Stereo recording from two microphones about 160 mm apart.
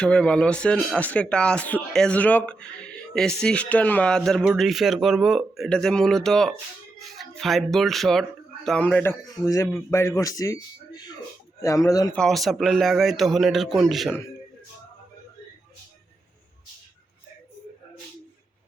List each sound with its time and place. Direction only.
0.0 s speech: 5° left (ahead or behind)
9.2 s a man's voice: 20° left (ahead or behind)
12.1 s speech: centre (ahead or behind)